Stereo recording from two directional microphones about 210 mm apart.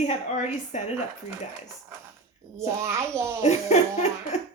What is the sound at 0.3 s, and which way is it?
Speech, 35° left (ahead or behind).